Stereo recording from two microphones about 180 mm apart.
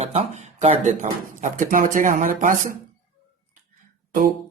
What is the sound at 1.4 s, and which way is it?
Speech, 45° right (ahead or behind).